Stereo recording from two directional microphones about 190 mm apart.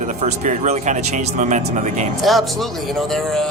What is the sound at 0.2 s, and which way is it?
Speech, 40° right (ahead or behind).